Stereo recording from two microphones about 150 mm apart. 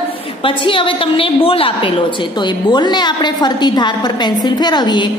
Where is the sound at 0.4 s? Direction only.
35° left (ahead or behind).